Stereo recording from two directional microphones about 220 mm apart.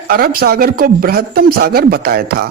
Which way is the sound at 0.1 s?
45° right (ahead or behind).